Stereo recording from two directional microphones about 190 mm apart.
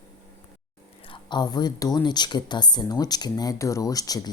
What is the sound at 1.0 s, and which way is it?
Speech, 25° left (ahead or behind).